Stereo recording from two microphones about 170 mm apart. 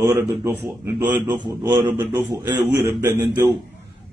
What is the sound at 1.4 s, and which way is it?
A man's voice, 25° right (ahead or behind).